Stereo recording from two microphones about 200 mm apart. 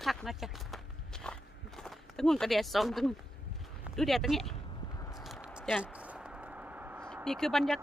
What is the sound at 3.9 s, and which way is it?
Speech, centre (ahead or behind).